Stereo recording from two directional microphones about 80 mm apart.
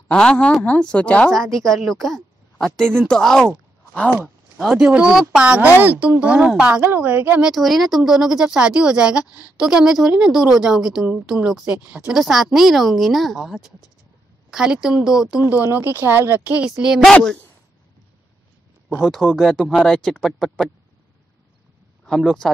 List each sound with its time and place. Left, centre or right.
0.1 s speech: centre
1.3 s speech: centre
4.6 s speech: centre
6.8 s a woman's voice: right
7.4 s speech: centre
15.5 s a woman's voice: right
16.5 s speech: centre
17.0 s speech: centre
18.9 s speech: centre
22.2 s speech: centre